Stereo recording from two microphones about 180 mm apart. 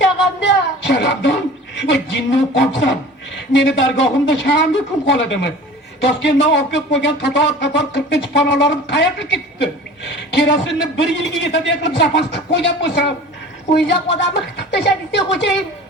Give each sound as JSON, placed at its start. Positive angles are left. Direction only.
{"t": 0.9, "sound": "music", "side_deg": 80}
{"t": 1.8, "sound": "a sound", "side_deg": 80}
{"t": 3.5, "sound": "speech", "side_deg": 85}